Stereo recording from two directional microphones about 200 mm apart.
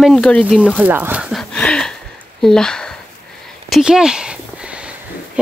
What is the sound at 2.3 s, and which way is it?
Speech, 5° left (ahead or behind).